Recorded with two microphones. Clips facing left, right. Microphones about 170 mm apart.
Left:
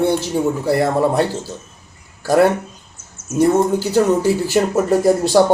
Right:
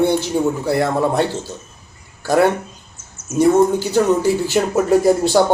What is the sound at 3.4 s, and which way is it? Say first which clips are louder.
A man's voice: right 1 dB; 5° left (ahead or behind).